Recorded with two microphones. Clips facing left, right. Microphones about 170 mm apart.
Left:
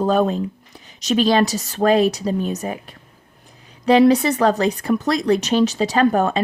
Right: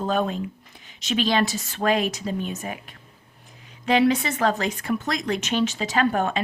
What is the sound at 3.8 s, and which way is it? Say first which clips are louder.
Speech: left 7 dB; 35° left (ahead or behind).